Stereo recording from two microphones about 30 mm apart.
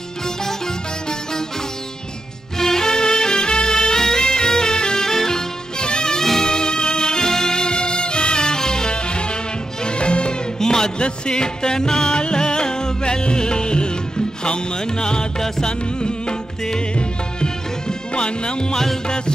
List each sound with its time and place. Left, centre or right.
2.6 s music: centre
5.8 s music: left
10.6 s music: centre
11.0 s music: left